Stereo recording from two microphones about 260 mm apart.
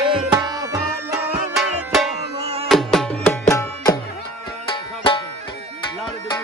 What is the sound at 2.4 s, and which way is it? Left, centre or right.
Music, right.